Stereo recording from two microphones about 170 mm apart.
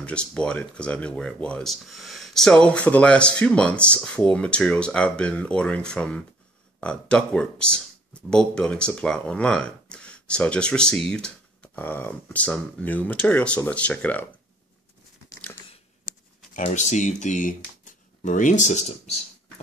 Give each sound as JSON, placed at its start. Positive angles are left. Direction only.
{"t": 0.0, "sound": "speech", "side_deg": 5}
{"t": 16.5, "sound": "speech", "side_deg": 50}